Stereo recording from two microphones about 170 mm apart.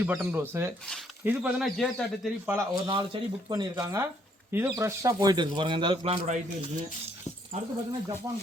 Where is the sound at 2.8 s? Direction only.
25° right (ahead or behind).